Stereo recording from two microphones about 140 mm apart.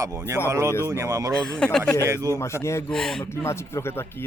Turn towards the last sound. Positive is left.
turn(degrees=15)  # may be behind; listen again after turning